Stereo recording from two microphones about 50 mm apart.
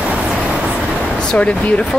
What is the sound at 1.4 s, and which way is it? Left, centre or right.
Speech, left.